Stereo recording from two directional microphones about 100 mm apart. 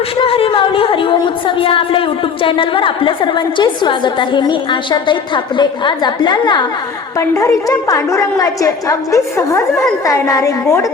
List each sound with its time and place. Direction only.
0.2 s a woman's voice: 65° left (ahead or behind); by 6.7 s 50° left (ahead or behind)
7.2 s a woman's voice: 30° left (ahead or behind)